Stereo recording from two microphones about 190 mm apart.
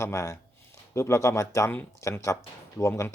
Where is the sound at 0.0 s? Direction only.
15° left (ahead or behind).